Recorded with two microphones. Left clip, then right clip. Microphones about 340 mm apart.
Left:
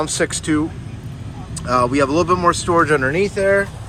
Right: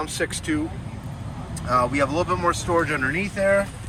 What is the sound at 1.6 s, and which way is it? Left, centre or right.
Speech, centre.